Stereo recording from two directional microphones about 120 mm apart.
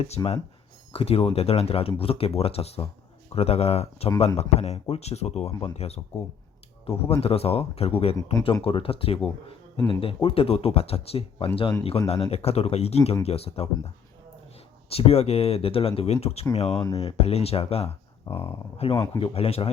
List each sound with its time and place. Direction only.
0.2 s a man's voice: 25° left (ahead or behind)
0.9 s speech: 50° left (ahead or behind)
18.9 s a man's voice: 25° left (ahead or behind)
19.2 s speech: 55° left (ahead or behind)